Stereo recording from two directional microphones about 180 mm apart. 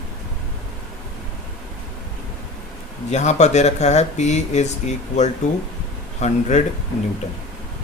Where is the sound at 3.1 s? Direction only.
40° left (ahead or behind).